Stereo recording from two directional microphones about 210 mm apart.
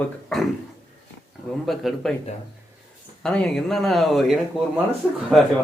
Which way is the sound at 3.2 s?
5° left (ahead or behind).